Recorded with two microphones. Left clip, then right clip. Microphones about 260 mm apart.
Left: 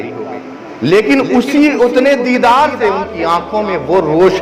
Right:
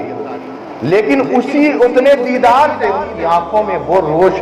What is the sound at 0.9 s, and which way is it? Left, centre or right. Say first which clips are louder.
A man's voice: left 2 dB; left.